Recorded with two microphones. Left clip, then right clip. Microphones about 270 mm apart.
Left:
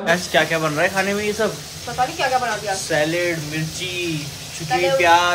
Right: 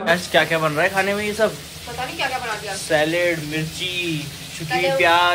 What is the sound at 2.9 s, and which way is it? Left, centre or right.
Speech, centre.